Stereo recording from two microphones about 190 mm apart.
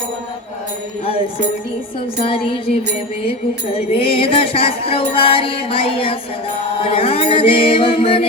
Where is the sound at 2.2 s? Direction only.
30° left (ahead or behind).